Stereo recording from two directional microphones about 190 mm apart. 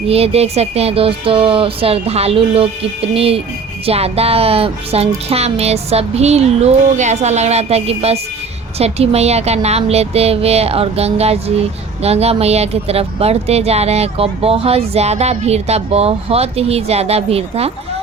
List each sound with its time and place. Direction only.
0.1 s speech: 30° right (ahead or behind)